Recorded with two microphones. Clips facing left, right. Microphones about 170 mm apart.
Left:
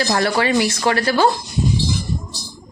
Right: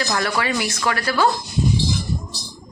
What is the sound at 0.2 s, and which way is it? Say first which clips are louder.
Speech: left 5 dB; 30° left (ahead or behind).